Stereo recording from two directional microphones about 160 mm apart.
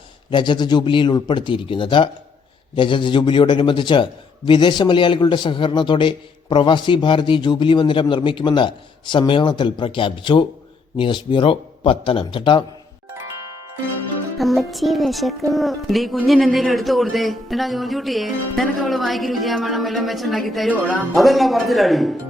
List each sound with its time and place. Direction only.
0.3 s a man's voice: 30° left (ahead or behind)
14.3 s speech: centre (ahead or behind)